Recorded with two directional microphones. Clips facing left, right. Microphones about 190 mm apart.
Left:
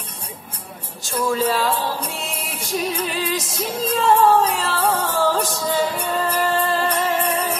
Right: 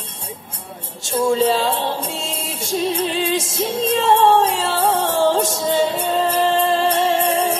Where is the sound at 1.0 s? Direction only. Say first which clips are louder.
Right 4 dB; 25° right (ahead or behind).